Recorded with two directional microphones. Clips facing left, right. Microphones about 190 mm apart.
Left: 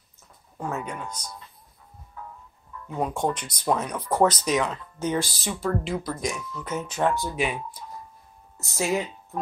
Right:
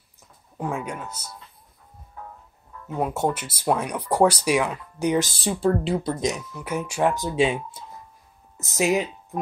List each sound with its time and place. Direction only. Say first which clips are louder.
0.6 s speech: right 2 dB; 10° right (ahead or behind)
2.9 s speech: right 2 dB; 5° right (ahead or behind)
5.4 s speech: right 5 dB; 30° right (ahead or behind)